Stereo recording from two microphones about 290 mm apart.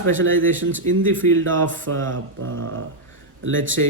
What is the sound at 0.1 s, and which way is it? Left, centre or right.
Speech, right.